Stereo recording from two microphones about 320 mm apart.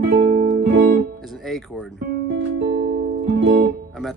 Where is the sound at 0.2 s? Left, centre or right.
Centre.